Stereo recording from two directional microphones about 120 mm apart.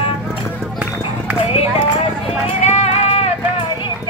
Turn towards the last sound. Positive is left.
turn(degrees=60)  # may be behind; listen again after turning